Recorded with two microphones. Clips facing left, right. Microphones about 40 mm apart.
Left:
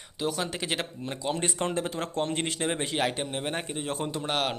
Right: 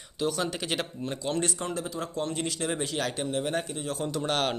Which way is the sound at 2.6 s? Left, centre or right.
Left.